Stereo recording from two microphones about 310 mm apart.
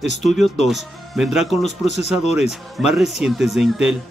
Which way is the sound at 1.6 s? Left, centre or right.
Left.